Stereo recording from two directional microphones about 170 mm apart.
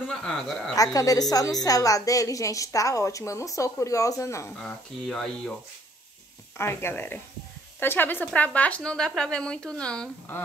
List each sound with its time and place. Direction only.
0.2 s speech: 5° left (ahead or behind)
0.9 s a woman's voice: 20° left (ahead or behind)
4.6 s speech: 5° left (ahead or behind)
6.6 s speech: 15° left (ahead or behind)